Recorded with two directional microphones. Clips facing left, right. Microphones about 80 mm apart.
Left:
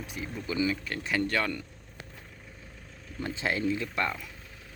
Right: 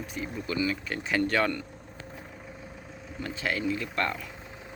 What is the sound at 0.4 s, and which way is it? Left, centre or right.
Speech, centre.